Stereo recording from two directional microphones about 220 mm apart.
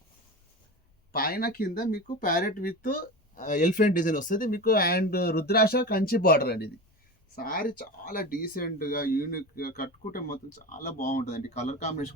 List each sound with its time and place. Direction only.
1.1 s speech: 45° left (ahead or behind)